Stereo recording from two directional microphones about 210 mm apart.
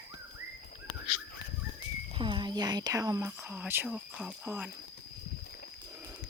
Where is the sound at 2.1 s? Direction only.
25° right (ahead or behind); by 4.7 s 5° right (ahead or behind).